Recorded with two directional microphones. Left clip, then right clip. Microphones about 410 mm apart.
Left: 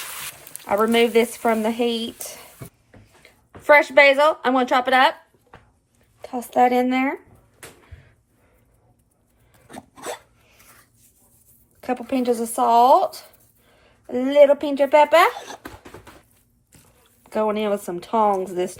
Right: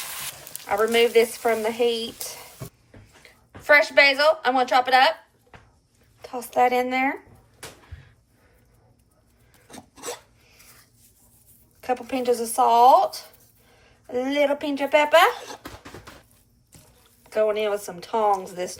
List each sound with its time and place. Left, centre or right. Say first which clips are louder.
0.7 s speech: left 1 dB; centre
3.6 s speech: left 3 dB; centre
6.2 s speech: left 3 dB; left
11.8 s speech: left 2 dB; centre
17.2 s speech: even; centre